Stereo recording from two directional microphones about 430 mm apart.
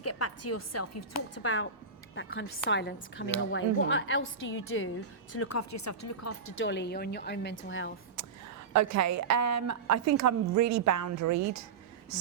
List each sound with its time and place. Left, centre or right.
0.0 s a woman's voice: left
8.7 s a woman's voice: right